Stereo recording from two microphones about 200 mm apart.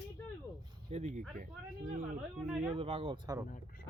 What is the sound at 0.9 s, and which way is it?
Speech, 35° right (ahead or behind).